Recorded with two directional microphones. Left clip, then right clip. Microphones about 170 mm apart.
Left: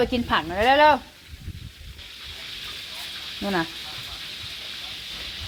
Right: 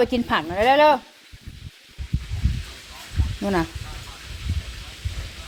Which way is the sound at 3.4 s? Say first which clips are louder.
Right 2 dB; 25° right (ahead or behind).